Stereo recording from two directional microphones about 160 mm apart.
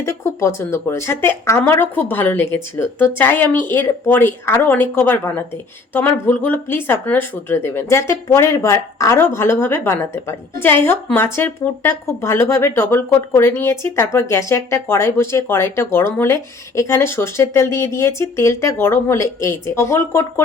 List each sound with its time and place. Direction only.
0.0 s speech: 15° left (ahead or behind)